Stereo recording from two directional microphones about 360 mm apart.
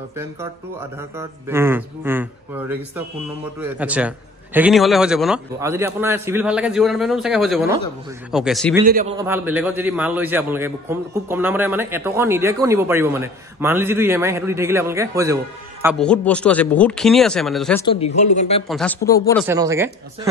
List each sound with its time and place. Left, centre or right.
0.2 s a man's voice: centre
17.8 s speech: centre
18.7 s a man's voice: centre
19.4 s a man's voice: centre